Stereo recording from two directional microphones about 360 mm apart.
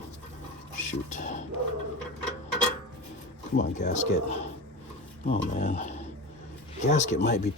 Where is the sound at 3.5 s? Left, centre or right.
Centre.